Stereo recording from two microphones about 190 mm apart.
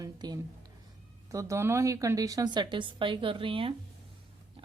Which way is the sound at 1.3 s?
15° right (ahead or behind).